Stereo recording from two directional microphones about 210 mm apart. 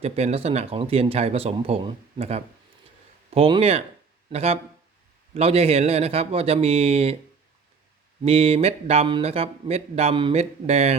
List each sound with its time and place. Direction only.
0.0 s speech: 30° right (ahead or behind)
8.2 s speech: 30° right (ahead or behind)